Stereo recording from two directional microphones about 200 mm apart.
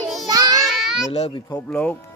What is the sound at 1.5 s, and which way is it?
Speech, 5° left (ahead or behind).